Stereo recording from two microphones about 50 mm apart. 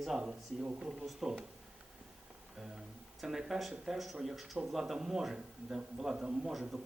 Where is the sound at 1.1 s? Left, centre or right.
Centre.